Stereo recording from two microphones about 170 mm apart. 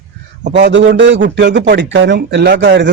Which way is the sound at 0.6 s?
90° right.